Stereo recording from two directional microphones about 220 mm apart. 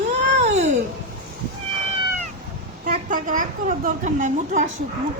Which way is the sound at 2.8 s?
35° right (ahead or behind).